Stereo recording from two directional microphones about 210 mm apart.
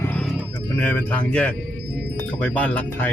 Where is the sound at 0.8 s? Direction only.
5° left (ahead or behind).